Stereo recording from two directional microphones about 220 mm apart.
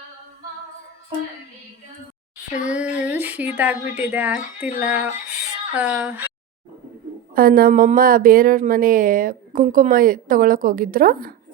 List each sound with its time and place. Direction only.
2.6 s speech: 5° right (ahead or behind)
7.3 s speech: 40° right (ahead or behind)